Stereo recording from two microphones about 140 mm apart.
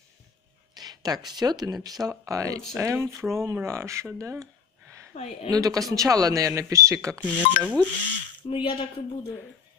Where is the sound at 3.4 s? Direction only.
20° right (ahead or behind).